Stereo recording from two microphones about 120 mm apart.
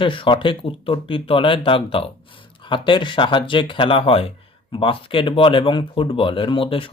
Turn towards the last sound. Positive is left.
turn(degrees=50)  # may be behind; listen again after turning